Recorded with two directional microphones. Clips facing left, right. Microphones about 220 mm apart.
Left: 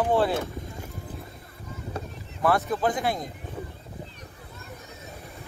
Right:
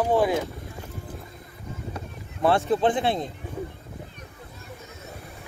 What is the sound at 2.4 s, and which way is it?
Speech, 30° right (ahead or behind).